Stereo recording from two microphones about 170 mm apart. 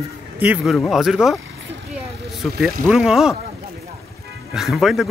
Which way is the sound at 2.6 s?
Centre (ahead or behind).